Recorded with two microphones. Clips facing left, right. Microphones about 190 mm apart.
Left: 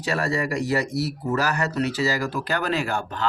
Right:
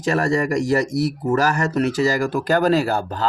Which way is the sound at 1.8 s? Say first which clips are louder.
Right 6 dB; 50° right (ahead or behind).